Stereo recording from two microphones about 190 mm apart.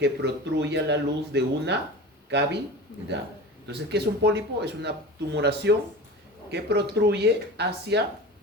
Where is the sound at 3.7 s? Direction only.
60° right (ahead or behind).